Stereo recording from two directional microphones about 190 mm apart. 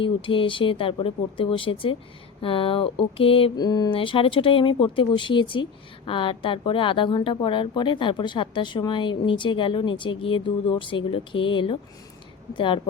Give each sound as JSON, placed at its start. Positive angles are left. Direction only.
{"t": 0.0, "sound": "a woman's voice", "side_deg": 25}